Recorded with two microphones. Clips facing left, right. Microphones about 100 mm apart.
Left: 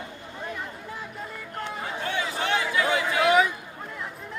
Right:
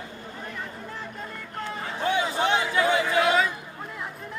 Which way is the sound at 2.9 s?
20° right (ahead or behind).